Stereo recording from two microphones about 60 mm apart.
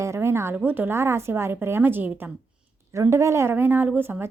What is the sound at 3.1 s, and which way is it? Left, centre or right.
Speech, right.